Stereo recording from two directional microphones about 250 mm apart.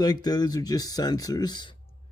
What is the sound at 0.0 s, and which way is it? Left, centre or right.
Speech, centre.